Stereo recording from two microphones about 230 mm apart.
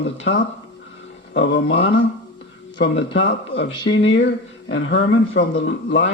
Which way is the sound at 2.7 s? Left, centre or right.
Left.